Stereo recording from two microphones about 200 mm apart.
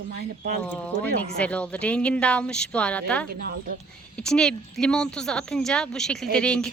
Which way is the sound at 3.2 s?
50° right (ahead or behind).